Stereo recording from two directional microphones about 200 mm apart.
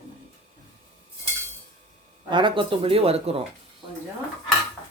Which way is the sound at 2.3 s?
25° right (ahead or behind).